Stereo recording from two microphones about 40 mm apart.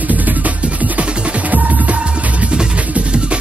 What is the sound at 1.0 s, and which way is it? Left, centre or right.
Music, right.